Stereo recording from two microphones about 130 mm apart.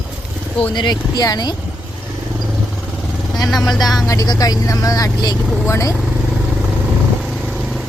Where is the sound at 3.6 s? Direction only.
Centre (ahead or behind).